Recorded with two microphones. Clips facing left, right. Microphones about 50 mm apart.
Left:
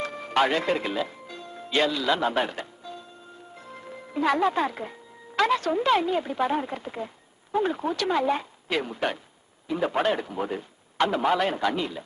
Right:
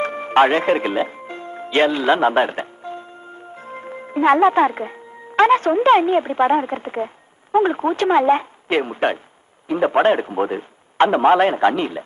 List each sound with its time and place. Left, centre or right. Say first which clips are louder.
0.0 s music: right 9 dB; right
5.4 s a man's voice: right 9 dB; right